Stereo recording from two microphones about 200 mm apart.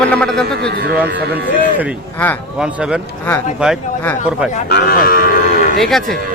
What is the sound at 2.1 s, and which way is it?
Speech, 10° left (ahead or behind).